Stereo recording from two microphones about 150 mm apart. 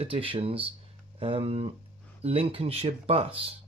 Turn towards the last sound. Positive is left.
turn(degrees=-40)  # may be behind; listen again after turning